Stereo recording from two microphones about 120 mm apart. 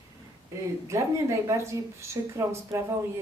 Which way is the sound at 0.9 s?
25° right (ahead or behind).